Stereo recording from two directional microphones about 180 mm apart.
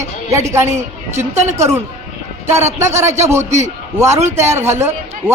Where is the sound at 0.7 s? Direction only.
40° right (ahead or behind).